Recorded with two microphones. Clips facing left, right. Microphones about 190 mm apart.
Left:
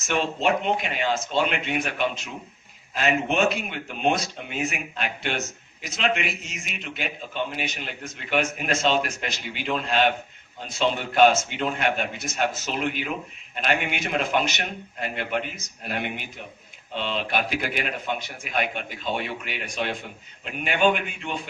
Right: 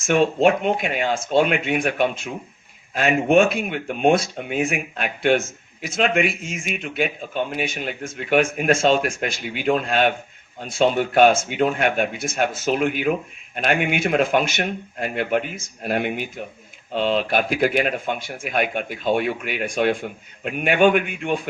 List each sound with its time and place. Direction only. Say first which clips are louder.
0.0 s speech: right 8 dB; 50° right (ahead or behind)